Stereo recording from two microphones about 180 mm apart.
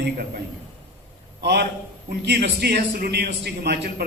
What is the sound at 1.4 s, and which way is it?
A man's voice, 65° right (ahead or behind).